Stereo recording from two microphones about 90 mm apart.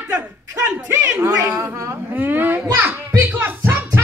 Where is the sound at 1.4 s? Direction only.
40° right (ahead or behind).